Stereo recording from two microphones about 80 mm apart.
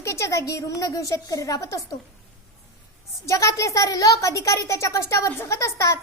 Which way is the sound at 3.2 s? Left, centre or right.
Left.